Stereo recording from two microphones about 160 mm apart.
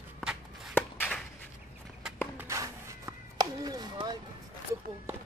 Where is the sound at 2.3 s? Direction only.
20° right (ahead or behind).